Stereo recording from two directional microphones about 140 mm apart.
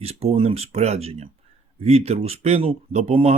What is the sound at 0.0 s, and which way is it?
Speech, 50° right (ahead or behind).